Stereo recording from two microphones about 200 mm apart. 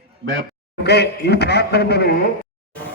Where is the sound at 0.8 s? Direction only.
55° left (ahead or behind).